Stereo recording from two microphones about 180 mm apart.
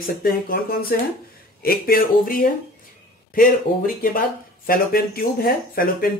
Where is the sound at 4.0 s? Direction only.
55° left (ahead or behind).